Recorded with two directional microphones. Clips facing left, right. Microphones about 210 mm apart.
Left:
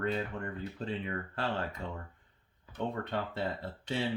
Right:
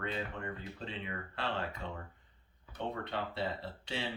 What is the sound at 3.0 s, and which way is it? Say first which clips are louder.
Speech: left 3 dB; 45° left (ahead or behind).